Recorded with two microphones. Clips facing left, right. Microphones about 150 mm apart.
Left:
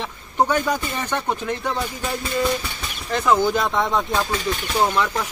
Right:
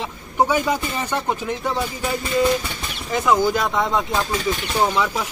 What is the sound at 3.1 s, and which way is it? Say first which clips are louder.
Speech: even; 5° right (ahead or behind).